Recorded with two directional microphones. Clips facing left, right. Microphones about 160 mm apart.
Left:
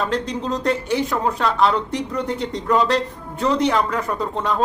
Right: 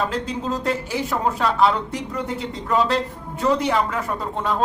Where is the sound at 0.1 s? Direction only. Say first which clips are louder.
Left 2 dB; 5° right (ahead or behind).